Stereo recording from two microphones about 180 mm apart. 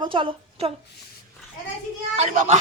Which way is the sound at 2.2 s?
40° right (ahead or behind).